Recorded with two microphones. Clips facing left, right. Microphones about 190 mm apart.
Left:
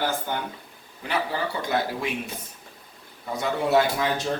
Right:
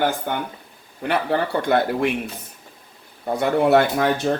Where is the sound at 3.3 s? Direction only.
60° right (ahead or behind).